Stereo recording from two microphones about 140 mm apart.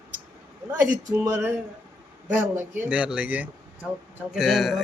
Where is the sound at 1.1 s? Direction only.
20° right (ahead or behind).